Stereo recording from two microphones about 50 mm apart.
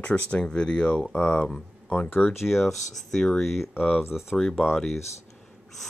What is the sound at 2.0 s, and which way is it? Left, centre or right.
Speech, left.